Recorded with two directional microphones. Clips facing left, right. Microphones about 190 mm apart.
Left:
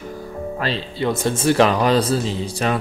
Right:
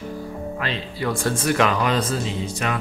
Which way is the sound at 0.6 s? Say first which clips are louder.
Left 5 dB; 30° left (ahead or behind).